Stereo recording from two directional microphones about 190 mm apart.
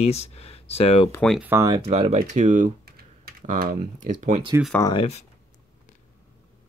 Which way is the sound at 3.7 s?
35° right (ahead or behind).